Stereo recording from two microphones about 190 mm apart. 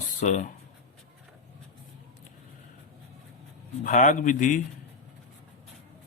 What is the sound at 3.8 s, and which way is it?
Speech, 40° left (ahead or behind).